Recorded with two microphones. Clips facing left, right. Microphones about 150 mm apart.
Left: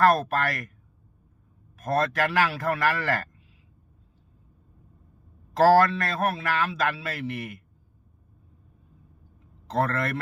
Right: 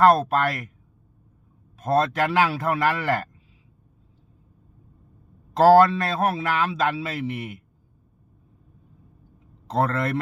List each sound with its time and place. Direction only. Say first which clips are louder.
0.0 s a man's voice: right 4 dB; 20° right (ahead or behind)
1.8 s a man's voice: right 3 dB; 25° right (ahead or behind)
5.5 s a man's voice: right 4 dB; 20° right (ahead or behind)
9.8 s a man's voice: right 4 dB; 20° right (ahead or behind)